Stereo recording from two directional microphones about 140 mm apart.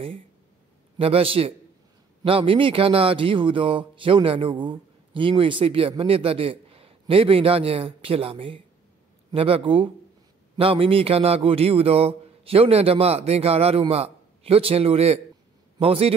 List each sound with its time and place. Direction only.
0.9 s a man's voice: 40° right (ahead or behind)